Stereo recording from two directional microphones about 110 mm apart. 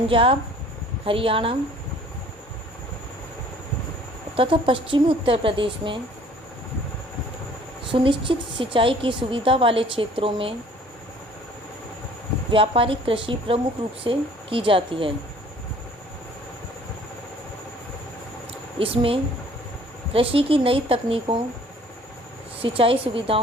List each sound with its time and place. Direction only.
0.1 s speech: 55° right (ahead or behind)
4.4 s a woman's voice: 55° right (ahead or behind)
7.9 s a woman's voice: 50° right (ahead or behind)
12.5 s a woman's voice: 55° right (ahead or behind)
18.8 s speech: 55° right (ahead or behind)
22.6 s speech: 55° right (ahead or behind)